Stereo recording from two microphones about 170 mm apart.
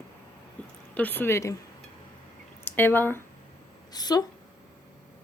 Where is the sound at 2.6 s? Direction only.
10° left (ahead or behind).